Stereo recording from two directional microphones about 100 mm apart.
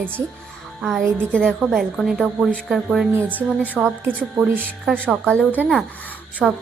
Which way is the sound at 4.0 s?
15° right (ahead or behind).